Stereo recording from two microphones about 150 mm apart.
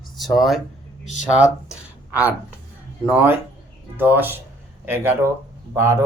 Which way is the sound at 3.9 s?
15° right (ahead or behind).